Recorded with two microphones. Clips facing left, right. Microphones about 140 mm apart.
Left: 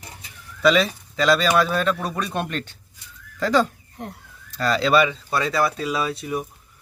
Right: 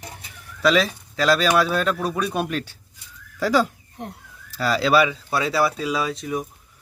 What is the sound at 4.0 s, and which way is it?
Speech, 20° right (ahead or behind).